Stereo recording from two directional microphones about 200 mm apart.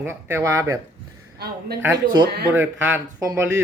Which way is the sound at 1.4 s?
55° right (ahead or behind).